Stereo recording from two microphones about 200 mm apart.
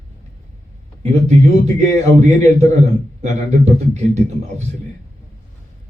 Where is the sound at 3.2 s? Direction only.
35° right (ahead or behind).